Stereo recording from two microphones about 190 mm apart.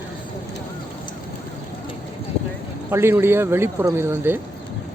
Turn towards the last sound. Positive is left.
turn(degrees=-10)  # may be behind; listen again after turning